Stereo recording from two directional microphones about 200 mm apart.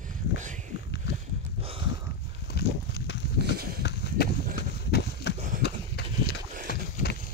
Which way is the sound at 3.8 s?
60° left (ahead or behind).